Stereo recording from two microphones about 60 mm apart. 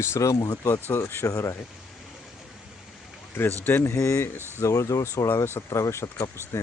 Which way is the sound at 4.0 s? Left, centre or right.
Left.